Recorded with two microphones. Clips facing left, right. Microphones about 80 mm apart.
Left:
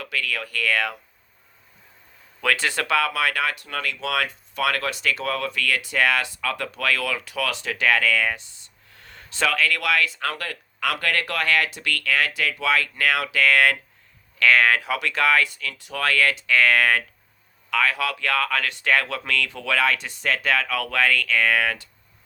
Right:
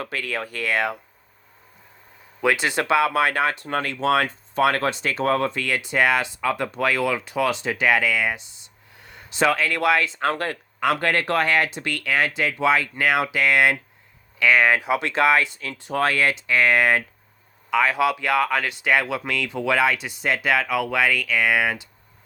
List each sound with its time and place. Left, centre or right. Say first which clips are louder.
0.0 s speech: right 1 dB; right
2.4 s speech: right 2 dB; centre